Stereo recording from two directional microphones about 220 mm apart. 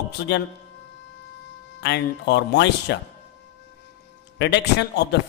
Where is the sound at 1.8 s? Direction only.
50° left (ahead or behind).